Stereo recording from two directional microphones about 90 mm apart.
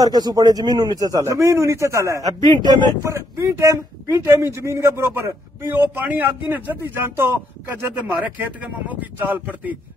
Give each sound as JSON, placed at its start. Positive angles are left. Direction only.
{"t": 0.0, "sound": "a man's voice", "side_deg": -45}
{"t": 2.5, "sound": "a man's voice", "side_deg": -55}